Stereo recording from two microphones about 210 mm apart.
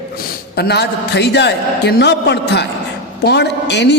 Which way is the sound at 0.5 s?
50° left (ahead or behind).